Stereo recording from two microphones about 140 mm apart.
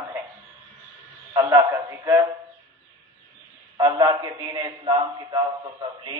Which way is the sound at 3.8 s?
25° right (ahead or behind).